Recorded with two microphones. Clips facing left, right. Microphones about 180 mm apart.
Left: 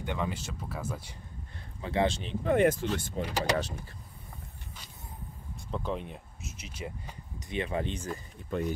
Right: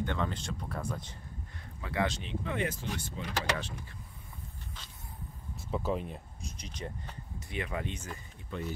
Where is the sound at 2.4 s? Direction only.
50° left (ahead or behind).